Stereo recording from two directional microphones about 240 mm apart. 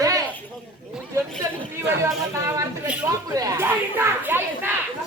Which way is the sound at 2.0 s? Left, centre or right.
Centre.